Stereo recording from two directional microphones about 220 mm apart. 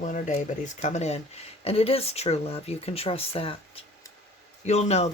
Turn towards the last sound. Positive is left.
turn(degrees=30)  # may be behind; listen again after turning